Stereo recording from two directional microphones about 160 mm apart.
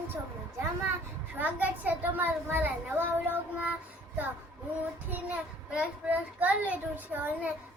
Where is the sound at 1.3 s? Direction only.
10° right (ahead or behind).